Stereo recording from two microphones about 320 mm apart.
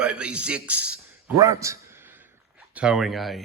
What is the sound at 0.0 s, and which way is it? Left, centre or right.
Speech, centre.